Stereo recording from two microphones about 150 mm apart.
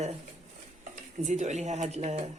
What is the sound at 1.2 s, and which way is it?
Speech, 50° right (ahead or behind).